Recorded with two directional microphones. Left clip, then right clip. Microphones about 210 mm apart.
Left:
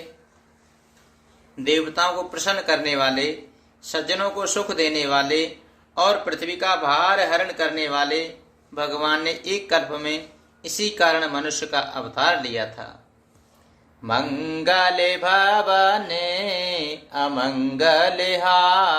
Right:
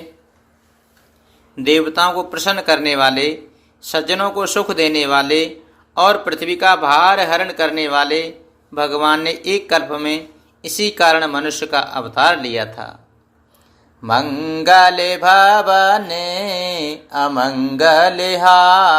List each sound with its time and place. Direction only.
1.5 s mantra: 40° right (ahead or behind)
14.0 s mantra: 30° right (ahead or behind)